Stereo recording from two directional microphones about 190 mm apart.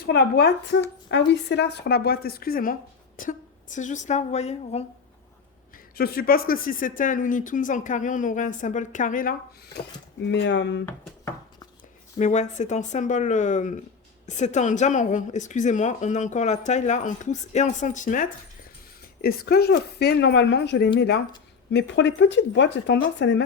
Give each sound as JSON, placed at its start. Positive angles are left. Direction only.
{"t": 0.0, "sound": "a woman's voice", "side_deg": 60}
{"t": 5.7, "sound": "speech", "side_deg": 55}
{"t": 9.7, "sound": "speech", "side_deg": 65}
{"t": 12.2, "sound": "speech", "side_deg": 40}
{"t": 19.2, "sound": "a woman's voice", "side_deg": 55}